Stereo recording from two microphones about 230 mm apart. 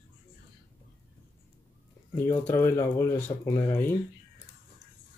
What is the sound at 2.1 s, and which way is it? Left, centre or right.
Speech, centre.